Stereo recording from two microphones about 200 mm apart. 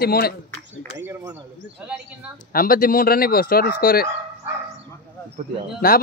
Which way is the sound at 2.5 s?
45° left (ahead or behind).